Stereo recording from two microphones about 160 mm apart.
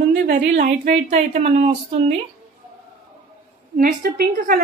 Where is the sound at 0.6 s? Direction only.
90° right.